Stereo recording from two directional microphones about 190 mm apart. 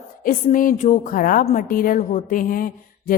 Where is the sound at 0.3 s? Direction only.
45° left (ahead or behind).